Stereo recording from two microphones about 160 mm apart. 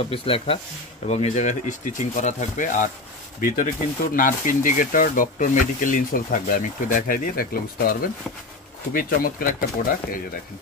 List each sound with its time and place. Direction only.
0.1 s speech: 35° left (ahead or behind); by 9.7 s 60° left (ahead or behind)